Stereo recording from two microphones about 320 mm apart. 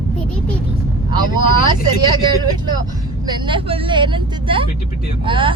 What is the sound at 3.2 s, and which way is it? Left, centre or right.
Speech, centre.